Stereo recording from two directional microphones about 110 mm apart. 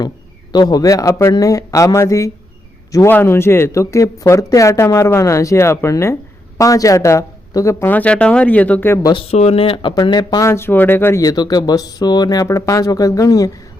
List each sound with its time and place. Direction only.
0.5 s speech: 35° left (ahead or behind)
7.9 s speech: 15° left (ahead or behind)
9.3 s speech: 75° left (ahead or behind); by 9.9 s 55° left (ahead or behind)
9.9 s speech: 40° left (ahead or behind)
10.4 s speech: 25° left (ahead or behind)
11.2 s speech: 35° left (ahead or behind)